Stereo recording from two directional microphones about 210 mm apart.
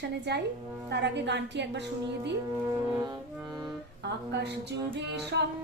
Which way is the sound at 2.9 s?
20° right (ahead or behind).